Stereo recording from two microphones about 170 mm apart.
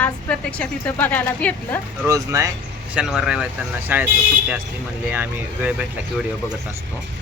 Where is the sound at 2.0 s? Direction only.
20° right (ahead or behind).